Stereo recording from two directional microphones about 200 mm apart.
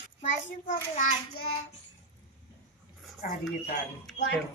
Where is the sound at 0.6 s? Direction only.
40° left (ahead or behind).